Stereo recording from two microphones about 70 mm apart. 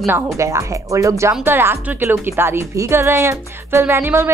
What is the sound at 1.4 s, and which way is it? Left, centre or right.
A woman's voice, right.